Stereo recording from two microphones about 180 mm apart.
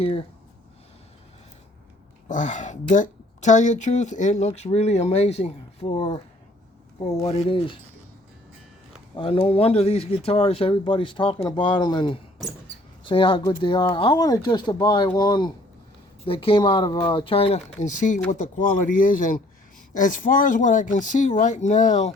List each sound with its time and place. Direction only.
0.0 s speech: 30° left (ahead or behind)
2.2 s speech: 45° left (ahead or behind); by 6.2 s 25° left (ahead or behind)
7.3 s speech: 35° left (ahead or behind)
9.1 s speech: 30° left (ahead or behind)